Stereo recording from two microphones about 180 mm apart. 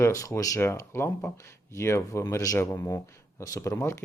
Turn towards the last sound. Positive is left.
turn(degrees=15)  # may be behind; listen again after turning